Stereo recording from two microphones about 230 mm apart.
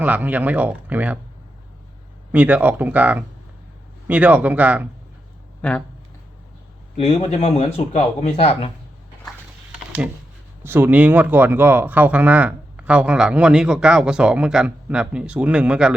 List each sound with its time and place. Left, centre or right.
0.0 s speech: centre
2.3 s speech: centre
6.9 s speech: left
10.6 s speech: centre